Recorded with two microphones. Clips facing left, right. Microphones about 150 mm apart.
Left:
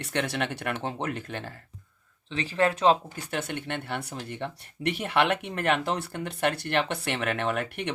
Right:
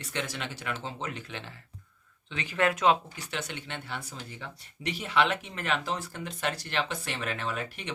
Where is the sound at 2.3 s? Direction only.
30° left (ahead or behind).